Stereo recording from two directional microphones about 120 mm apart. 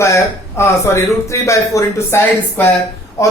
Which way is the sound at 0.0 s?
25° left (ahead or behind).